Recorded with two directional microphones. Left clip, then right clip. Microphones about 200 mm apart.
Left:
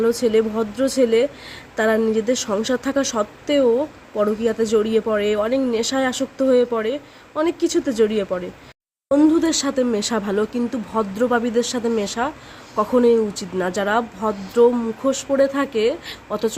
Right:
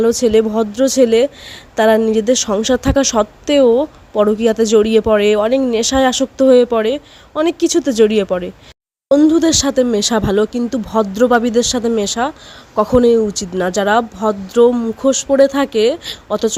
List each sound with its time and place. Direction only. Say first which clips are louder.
0.0 s speech: right 5 dB; 45° right (ahead or behind)